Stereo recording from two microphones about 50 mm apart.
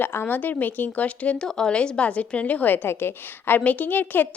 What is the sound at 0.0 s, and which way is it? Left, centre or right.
A woman's voice, left.